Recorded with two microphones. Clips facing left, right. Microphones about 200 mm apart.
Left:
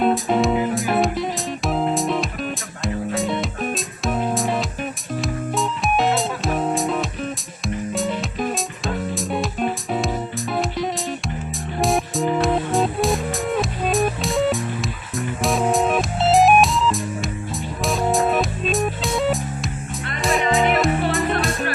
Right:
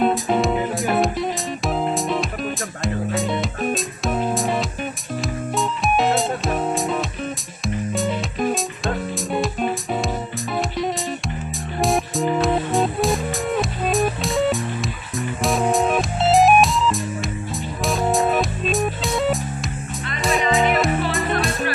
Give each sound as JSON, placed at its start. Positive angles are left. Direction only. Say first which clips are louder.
{"t": 0.0, "sound": "music", "louder": "left 1 dB", "side_deg": 0}